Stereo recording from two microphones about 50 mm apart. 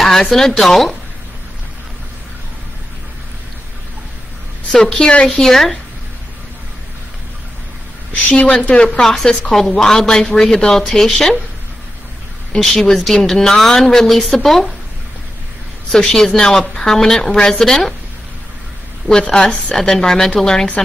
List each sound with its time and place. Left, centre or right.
0.0 s speech: centre
4.6 s a woman's voice: centre
5.4 s speech: centre
8.1 s a woman's voice: left
9.0 s speech: centre
12.9 s speech: centre
15.9 s speech: centre
19.0 s a woman's voice: centre
19.7 s speech: centre